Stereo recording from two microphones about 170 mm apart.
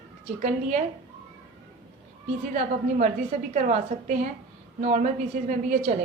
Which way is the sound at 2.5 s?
45° right (ahead or behind).